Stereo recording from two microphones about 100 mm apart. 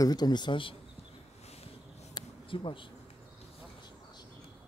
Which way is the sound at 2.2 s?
40° left (ahead or behind).